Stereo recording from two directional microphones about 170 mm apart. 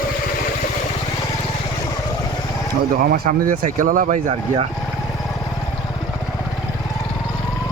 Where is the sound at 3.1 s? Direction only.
50° right (ahead or behind).